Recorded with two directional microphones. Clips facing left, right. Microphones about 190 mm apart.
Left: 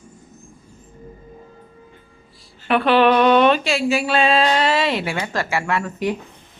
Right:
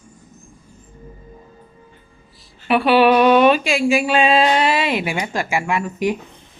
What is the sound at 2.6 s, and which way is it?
Speech, 10° right (ahead or behind).